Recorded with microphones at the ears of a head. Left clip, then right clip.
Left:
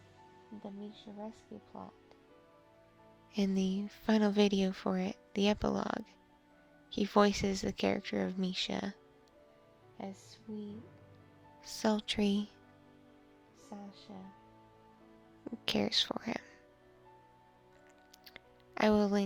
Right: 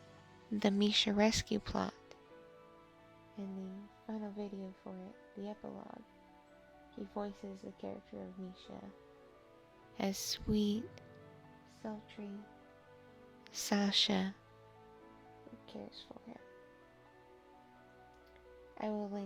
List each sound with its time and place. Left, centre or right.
0.5 s speech: right
3.3 s speech: left
10.0 s speech: right
11.6 s speech: left
13.5 s speech: right
15.4 s speech: left
18.7 s speech: left